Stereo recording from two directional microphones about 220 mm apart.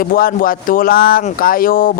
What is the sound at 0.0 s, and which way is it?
Speech, 40° left (ahead or behind).